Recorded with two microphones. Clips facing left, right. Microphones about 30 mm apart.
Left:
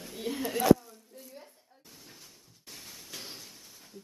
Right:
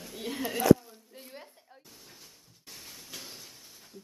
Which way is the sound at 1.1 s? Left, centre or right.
Right.